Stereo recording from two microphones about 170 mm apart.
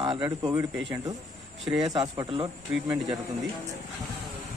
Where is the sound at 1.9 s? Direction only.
20° right (ahead or behind).